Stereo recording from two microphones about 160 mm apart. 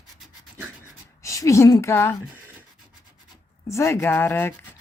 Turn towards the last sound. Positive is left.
turn(degrees=15)  # may be behind; listen again after turning